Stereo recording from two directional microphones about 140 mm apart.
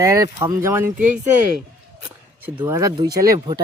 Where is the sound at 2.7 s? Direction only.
30° right (ahead or behind).